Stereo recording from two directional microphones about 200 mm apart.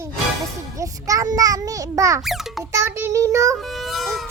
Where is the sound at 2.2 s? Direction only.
Centre (ahead or behind).